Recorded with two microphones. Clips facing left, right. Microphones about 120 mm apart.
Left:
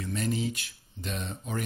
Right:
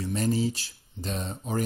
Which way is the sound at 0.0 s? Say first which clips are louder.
Right 4 dB; 35° right (ahead or behind).